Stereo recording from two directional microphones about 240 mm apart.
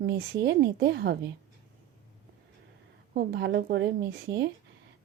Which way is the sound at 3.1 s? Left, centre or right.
Right.